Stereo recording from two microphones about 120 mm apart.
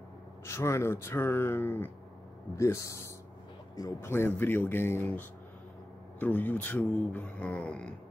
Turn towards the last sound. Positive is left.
turn(degrees=10)  # may be behind; listen again after turning